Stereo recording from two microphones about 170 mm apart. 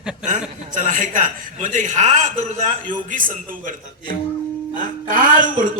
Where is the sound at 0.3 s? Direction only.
50° right (ahead or behind).